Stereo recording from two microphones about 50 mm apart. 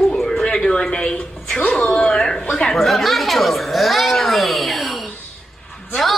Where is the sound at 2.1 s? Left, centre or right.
Centre.